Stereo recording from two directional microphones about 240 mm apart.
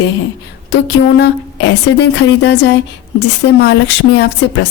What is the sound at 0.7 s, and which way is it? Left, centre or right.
Speech, left.